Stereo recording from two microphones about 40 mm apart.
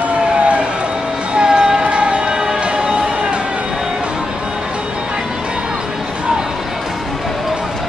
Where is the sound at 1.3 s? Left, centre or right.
Centre.